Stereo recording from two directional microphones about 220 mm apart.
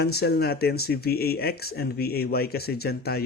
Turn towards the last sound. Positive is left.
turn(degrees=45)  # may be behind; listen again after turning